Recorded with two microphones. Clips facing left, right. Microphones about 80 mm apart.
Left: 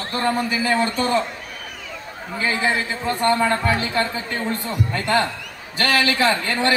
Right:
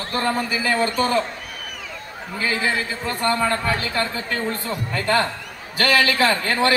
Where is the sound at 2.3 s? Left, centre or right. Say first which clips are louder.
Left 1 dB; left.